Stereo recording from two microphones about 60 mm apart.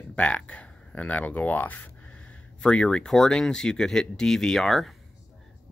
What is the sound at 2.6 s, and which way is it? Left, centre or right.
Speech, centre.